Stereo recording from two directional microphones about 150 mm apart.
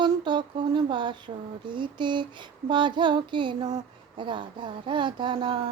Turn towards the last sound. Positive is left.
turn(degrees=-35)  # may be behind; listen again after turning